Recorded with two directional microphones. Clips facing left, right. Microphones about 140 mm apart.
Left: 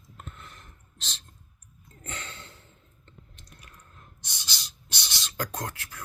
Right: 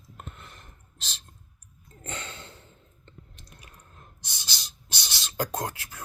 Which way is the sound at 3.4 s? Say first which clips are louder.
Right 1 dB; 25° right (ahead or behind).